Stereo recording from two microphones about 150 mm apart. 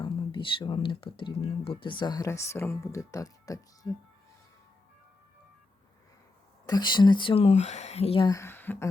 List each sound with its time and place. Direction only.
0.0 s speech: 35° left (ahead or behind)
6.7 s speech: 30° left (ahead or behind); by 8.2 s 45° left (ahead or behind)
8.2 s speech: 20° left (ahead or behind)